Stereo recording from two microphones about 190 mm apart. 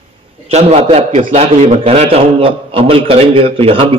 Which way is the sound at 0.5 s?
35° right (ahead or behind).